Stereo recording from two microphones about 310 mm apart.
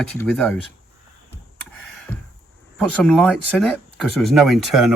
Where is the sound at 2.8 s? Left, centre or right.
Centre.